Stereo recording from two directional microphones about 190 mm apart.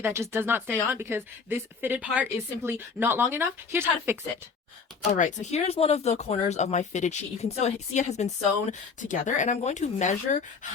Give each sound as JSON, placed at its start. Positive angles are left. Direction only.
{"t": 0.0, "sound": "a woman's voice", "side_deg": -15}
{"t": 5.0, "sound": "speech", "side_deg": 40}